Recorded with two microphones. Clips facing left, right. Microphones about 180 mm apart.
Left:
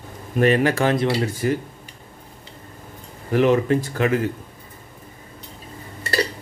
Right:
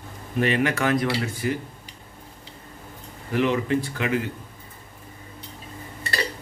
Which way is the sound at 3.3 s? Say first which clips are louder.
Left 5 dB; 45° left (ahead or behind).